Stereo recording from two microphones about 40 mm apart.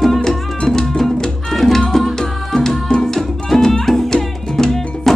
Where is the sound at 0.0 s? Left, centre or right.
Centre.